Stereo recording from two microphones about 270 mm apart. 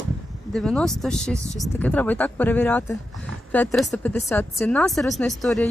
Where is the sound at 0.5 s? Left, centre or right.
Centre.